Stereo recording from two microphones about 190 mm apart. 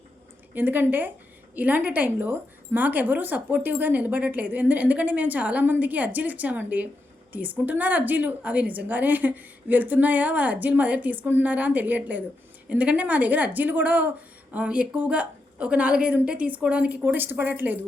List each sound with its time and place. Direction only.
0.5 s speech: 10° right (ahead or behind)